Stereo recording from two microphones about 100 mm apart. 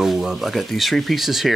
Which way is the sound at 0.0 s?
Centre (ahead or behind).